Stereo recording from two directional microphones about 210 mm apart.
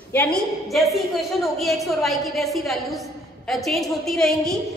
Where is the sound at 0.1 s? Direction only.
5° left (ahead or behind).